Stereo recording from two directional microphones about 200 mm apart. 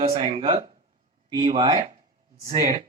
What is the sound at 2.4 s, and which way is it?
Speech, 35° right (ahead or behind).